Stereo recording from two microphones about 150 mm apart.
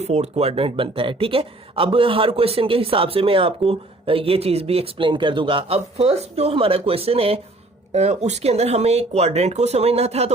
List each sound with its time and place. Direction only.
0.0 s speech: 45° right (ahead or behind)